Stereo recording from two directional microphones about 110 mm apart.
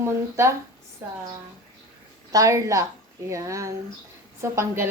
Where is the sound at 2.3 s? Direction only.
30° right (ahead or behind).